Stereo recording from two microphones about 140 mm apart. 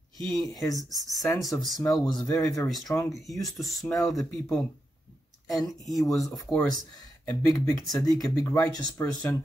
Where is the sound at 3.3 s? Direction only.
Centre (ahead or behind).